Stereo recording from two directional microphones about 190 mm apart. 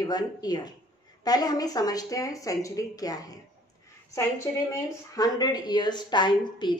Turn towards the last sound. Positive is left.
turn(degrees=25)  # may be behind; listen again after turning